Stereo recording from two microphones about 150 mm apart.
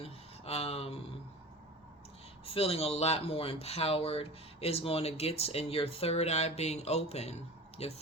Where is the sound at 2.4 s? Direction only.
40° left (ahead or behind).